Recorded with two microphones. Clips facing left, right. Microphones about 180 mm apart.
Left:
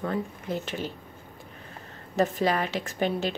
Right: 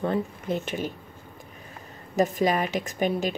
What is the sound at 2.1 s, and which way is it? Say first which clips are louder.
Speech: right 2 dB; 15° right (ahead or behind).